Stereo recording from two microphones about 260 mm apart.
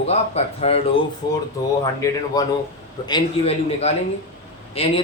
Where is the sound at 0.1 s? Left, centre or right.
Left.